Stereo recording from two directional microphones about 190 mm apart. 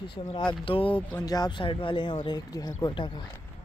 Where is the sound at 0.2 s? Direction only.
20° left (ahead or behind).